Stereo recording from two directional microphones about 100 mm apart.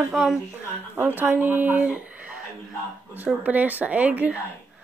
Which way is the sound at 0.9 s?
25° right (ahead or behind).